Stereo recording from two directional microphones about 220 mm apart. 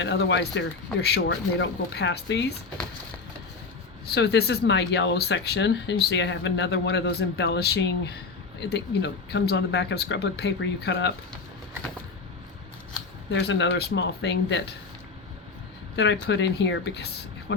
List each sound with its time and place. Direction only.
0.0 s speech: 50° left (ahead or behind)
4.0 s speech: 50° left (ahead or behind)
13.3 s speech: 55° left (ahead or behind)
16.2 s speech: 50° left (ahead or behind)